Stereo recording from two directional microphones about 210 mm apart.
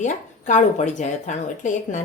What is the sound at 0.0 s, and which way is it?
A woman's voice, 35° left (ahead or behind).